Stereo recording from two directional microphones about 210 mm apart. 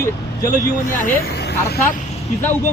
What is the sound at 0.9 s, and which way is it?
Speech, 45° left (ahead or behind).